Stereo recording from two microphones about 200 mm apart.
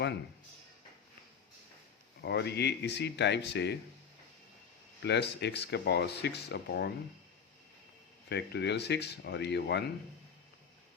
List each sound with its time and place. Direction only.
2.2 s speech: 55° left (ahead or behind)
5.0 s speech: 60° left (ahead or behind)
8.3 s speech: 55° left (ahead or behind)